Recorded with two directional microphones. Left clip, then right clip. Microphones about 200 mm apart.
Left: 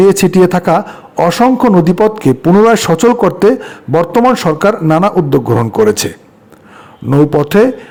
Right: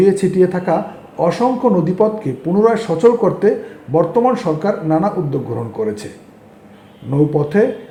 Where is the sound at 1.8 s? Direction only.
45° left (ahead or behind).